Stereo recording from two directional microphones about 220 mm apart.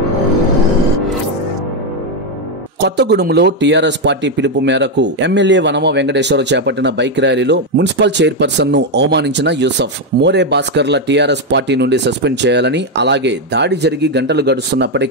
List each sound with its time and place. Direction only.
2.8 s speech: 50° right (ahead or behind)